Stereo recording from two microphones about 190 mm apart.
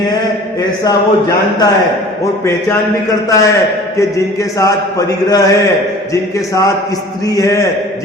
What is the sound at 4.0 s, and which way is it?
A man's voice, 15° left (ahead or behind).